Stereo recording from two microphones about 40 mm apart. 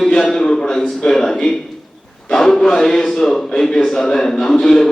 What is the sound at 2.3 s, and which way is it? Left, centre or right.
A man's voice, centre.